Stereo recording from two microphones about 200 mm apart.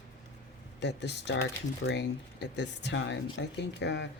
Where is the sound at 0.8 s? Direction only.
60° left (ahead or behind).